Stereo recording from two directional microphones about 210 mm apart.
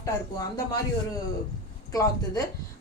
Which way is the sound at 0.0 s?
15° left (ahead or behind).